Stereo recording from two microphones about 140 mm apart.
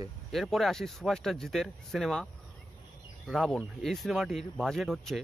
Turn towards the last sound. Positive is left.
turn(degrees=0)  # may be behind; listen again after turning